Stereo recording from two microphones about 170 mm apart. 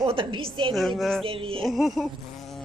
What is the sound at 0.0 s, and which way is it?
Speech, 30° right (ahead or behind).